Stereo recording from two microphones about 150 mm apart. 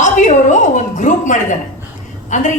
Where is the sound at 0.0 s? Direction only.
55° left (ahead or behind).